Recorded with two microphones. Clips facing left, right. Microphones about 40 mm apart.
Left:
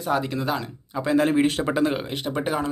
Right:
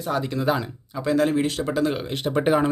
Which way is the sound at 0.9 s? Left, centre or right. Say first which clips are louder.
Left 1 dB; centre.